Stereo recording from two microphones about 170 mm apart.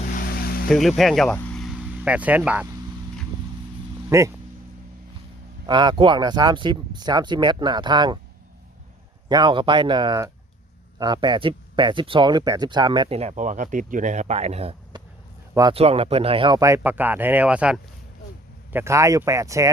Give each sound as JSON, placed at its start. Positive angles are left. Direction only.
{"t": 0.1, "sound": "vehicle", "side_deg": 60}
{"t": 0.7, "sound": "speech", "side_deg": 0}
{"t": 4.1, "sound": "speech", "side_deg": -15}
{"t": 5.6, "sound": "speech", "side_deg": -25}
{"t": 9.3, "sound": "speech", "side_deg": -25}
{"t": 16.6, "sound": "speech", "side_deg": -15}